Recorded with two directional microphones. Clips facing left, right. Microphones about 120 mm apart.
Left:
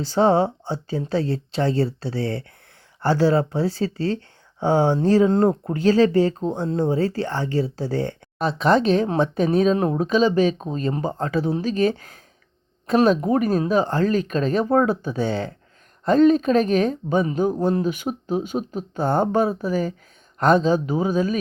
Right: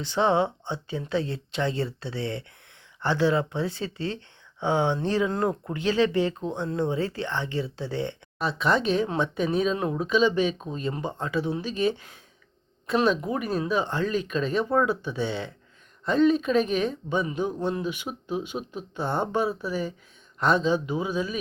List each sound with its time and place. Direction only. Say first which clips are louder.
0.0 s speech: left 5 dB; 35° left (ahead or behind)